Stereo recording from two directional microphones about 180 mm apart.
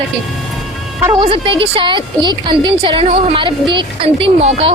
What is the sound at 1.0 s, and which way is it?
A woman's voice, 25° right (ahead or behind).